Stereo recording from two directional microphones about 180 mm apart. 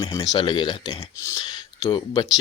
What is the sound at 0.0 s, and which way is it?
Speech, 20° left (ahead or behind).